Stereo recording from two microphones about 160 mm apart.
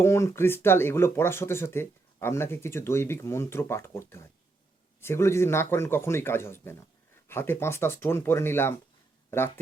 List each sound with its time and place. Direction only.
0.0 s speech: 15° left (ahead or behind)